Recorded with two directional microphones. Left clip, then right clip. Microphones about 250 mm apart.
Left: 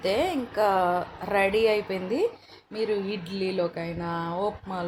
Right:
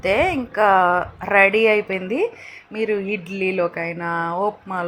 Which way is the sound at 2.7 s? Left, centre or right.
Right.